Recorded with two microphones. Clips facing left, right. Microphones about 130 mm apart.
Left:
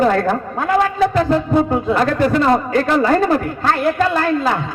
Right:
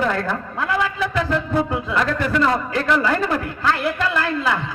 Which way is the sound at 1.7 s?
45° left (ahead or behind).